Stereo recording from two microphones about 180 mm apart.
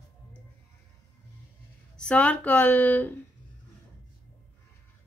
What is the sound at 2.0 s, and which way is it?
Speech, 5° left (ahead or behind).